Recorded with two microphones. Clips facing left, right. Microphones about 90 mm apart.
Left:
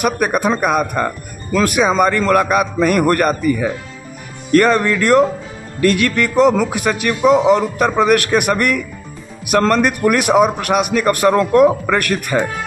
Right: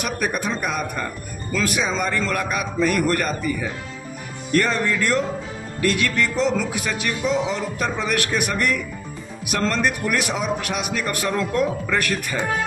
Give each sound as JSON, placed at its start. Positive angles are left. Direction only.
{"t": 0.0, "sound": "speech", "side_deg": 55}